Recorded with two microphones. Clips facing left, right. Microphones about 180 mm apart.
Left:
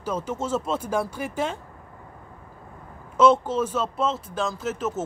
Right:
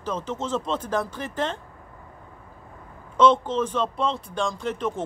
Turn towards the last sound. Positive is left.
turn(degrees=5)  # may be behind; listen again after turning